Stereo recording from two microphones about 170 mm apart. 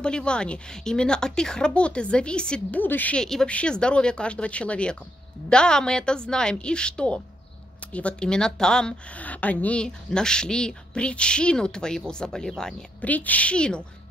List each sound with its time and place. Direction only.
0.0 s a woman's voice: 5° left (ahead or behind)